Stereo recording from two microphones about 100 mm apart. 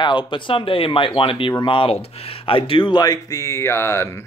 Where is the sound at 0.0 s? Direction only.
50° left (ahead or behind).